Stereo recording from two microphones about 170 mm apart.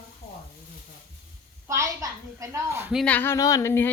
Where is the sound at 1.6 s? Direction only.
15° right (ahead or behind).